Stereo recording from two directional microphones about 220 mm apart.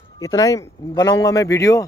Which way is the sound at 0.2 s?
15° left (ahead or behind).